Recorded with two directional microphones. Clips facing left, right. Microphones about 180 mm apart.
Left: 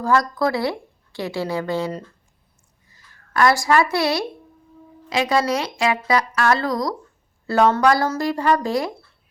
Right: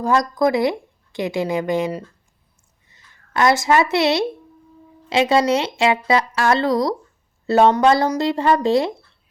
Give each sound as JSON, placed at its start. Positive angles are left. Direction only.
{"t": 0.0, "sound": "a woman's voice", "side_deg": -20}